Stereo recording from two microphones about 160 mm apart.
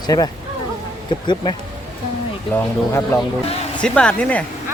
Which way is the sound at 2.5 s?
15° left (ahead or behind).